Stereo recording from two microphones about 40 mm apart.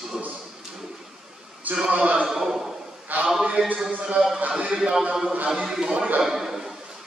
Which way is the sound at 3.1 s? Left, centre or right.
Right.